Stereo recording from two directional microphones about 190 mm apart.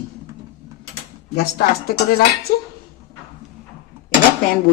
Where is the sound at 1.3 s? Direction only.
55° left (ahead or behind).